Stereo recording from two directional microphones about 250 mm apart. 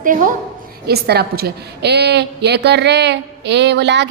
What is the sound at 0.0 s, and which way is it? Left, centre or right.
A woman's voice, right.